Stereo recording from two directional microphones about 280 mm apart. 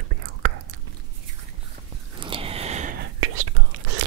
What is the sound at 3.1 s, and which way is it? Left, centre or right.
Whispering, right.